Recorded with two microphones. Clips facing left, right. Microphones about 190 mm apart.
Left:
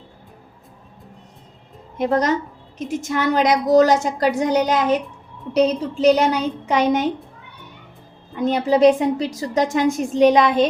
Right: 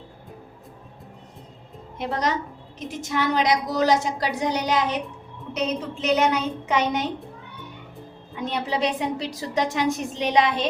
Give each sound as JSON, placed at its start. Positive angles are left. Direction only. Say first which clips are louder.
{"t": 2.0, "sound": "a woman's voice", "louder": "left 7 dB", "side_deg": 45}
{"t": 5.5, "sound": "a woman's voice", "louder": "left 9 dB", "side_deg": 35}
{"t": 8.4, "sound": "a woman's voice", "louder": "left 10 dB", "side_deg": 45}